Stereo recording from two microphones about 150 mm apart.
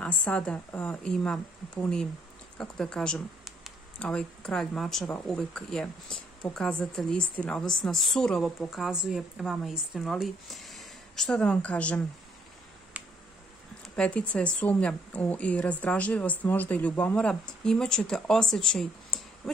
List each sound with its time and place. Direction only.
0.0 s speech: 10° left (ahead or behind)
13.8 s speech: 5° left (ahead or behind)